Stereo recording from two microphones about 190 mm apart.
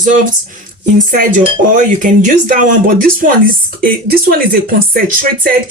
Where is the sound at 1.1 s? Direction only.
45° right (ahead or behind).